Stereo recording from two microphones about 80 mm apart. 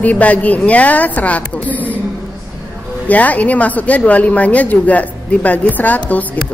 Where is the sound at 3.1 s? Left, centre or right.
Centre.